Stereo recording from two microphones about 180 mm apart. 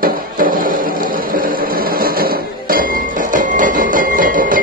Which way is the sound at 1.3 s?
55° right (ahead or behind).